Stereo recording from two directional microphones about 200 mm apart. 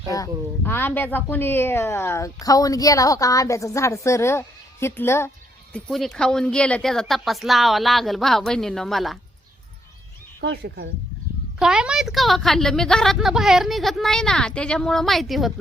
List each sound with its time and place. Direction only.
0.1 s speech: 15° left (ahead or behind)
5.7 s a woman's voice: centre (ahead or behind)
10.4 s speech: 60° right (ahead or behind)
11.6 s a woman's voice: 5° right (ahead or behind)